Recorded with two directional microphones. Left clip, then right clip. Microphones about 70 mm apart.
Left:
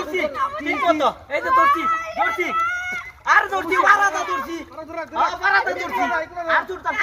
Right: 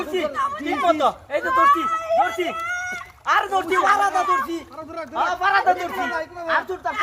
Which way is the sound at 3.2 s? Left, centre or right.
Centre.